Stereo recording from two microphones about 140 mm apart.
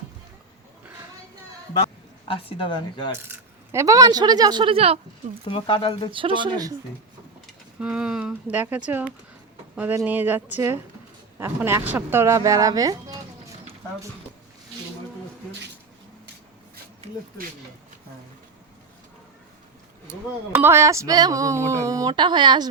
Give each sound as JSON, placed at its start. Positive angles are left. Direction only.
{"t": 2.2, "sound": "speech", "side_deg": 40}
{"t": 3.2, "sound": "speech", "side_deg": -20}
{"t": 5.5, "sound": "speech", "side_deg": 35}
{"t": 6.1, "sound": "speech", "side_deg": -40}
{"t": 7.8, "sound": "speech", "side_deg": -5}
{"t": 20.6, "sound": "speech", "side_deg": -15}